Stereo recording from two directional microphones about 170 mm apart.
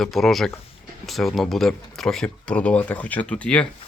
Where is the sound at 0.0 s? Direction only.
Centre (ahead or behind).